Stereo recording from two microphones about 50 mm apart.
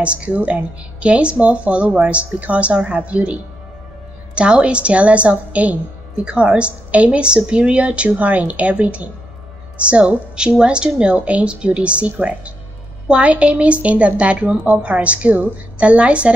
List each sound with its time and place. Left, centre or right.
0.0 s a woman's voice: right
4.4 s a woman's voice: right